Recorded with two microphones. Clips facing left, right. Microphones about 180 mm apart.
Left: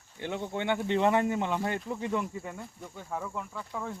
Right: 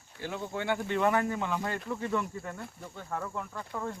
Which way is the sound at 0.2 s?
20° left (ahead or behind).